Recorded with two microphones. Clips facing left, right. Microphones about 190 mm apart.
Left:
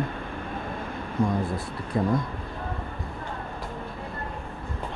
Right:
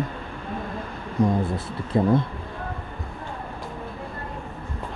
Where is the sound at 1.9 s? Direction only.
25° right (ahead or behind).